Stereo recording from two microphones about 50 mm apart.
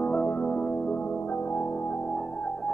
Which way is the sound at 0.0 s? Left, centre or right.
Left.